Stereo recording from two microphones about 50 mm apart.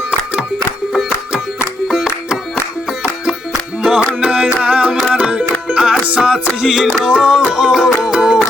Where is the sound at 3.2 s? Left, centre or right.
Centre.